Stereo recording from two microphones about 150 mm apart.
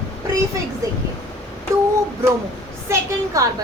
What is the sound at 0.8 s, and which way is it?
Speech, 20° right (ahead or behind).